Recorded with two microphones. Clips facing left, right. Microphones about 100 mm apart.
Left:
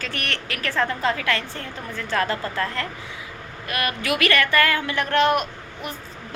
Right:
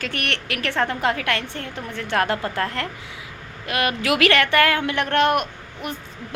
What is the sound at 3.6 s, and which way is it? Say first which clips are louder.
A woman's voice: right 3 dB; 90° right.